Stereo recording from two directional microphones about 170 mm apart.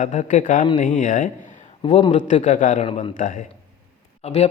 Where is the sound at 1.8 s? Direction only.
30° left (ahead or behind).